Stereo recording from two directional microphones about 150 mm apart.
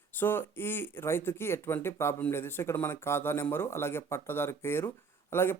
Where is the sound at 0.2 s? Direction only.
15° left (ahead or behind).